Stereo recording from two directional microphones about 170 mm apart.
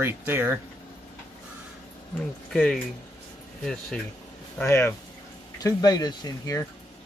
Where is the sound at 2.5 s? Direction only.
5° left (ahead or behind).